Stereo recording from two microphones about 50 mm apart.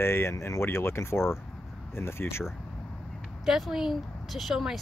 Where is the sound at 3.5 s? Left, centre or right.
Centre.